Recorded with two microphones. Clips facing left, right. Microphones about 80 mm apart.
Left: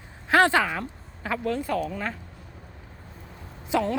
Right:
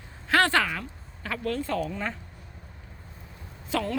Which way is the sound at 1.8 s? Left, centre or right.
Centre.